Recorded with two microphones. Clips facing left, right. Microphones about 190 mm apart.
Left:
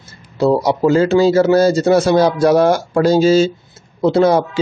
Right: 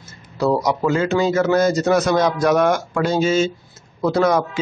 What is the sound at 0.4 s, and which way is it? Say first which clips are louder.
Speech: left 5 dB; 30° left (ahead or behind).